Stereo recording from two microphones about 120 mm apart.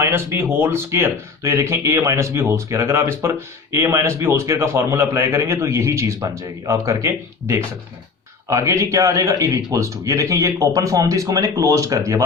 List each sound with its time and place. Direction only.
0.0 s speech: 20° right (ahead or behind)